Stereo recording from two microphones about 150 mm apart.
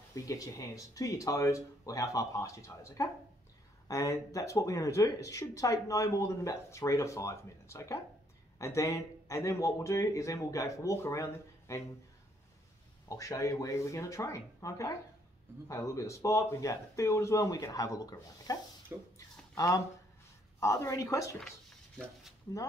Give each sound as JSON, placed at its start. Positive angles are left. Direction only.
{"t": 0.1, "sound": "speech", "side_deg": 20}
{"t": 13.1, "sound": "speech", "side_deg": 20}
{"t": 19.1, "sound": "a sound", "side_deg": 25}
{"t": 20.6, "sound": "speech", "side_deg": 20}